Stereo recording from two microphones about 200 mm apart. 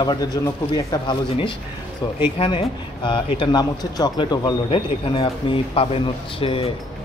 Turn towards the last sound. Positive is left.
turn(degrees=25)  # may be behind; listen again after turning